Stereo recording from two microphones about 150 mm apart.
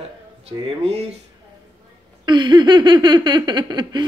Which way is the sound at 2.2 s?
30° right (ahead or behind).